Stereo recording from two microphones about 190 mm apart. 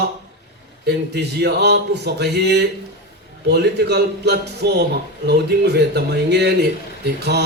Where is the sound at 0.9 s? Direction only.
60° right (ahead or behind).